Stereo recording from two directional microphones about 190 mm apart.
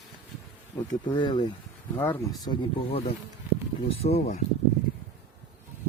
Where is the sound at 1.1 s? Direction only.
25° left (ahead or behind).